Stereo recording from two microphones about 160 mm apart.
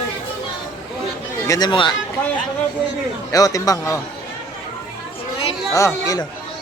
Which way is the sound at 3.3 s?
20° left (ahead or behind).